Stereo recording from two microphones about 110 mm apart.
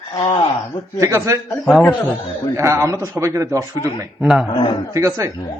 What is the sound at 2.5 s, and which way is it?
A man's voice, 25° right (ahead or behind).